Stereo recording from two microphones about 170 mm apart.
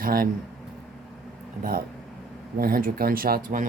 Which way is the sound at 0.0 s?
60° right (ahead or behind).